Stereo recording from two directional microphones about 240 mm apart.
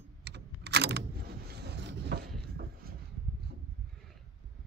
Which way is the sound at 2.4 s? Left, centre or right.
Right.